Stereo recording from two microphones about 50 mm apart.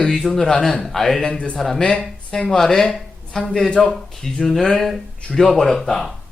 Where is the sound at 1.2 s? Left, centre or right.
Left.